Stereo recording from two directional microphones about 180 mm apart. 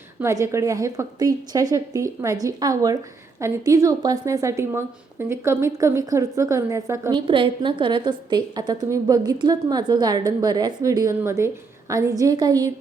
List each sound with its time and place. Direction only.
0.2 s a woman's voice: 15° right (ahead or behind)
7.3 s a woman's voice: 30° right (ahead or behind)